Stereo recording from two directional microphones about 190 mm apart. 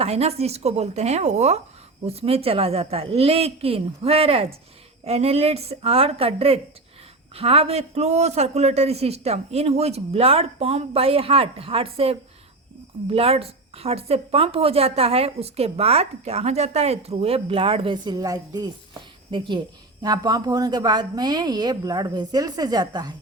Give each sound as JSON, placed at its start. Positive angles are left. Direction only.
{"t": 0.0, "sound": "a woman's voice", "side_deg": -35}